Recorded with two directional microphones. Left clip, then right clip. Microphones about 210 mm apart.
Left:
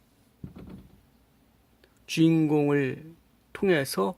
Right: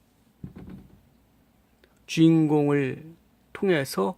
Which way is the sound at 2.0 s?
5° right (ahead or behind).